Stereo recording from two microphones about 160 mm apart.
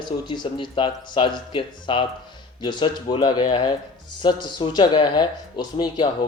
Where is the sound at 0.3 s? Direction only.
30° left (ahead or behind).